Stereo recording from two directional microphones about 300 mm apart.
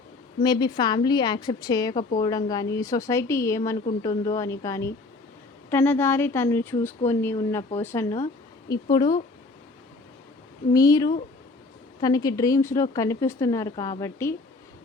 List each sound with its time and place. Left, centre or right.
0.4 s speech: centre
10.7 s speech: centre